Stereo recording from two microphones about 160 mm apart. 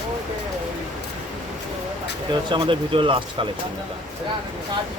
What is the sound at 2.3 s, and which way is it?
Speech, 30° right (ahead or behind).